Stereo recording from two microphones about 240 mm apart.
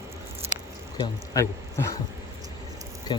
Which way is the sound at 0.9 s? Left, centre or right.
Centre.